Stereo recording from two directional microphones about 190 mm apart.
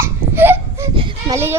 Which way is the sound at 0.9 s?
25° right (ahead or behind).